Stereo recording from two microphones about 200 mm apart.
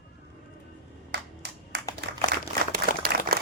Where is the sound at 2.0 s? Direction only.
55° right (ahead or behind).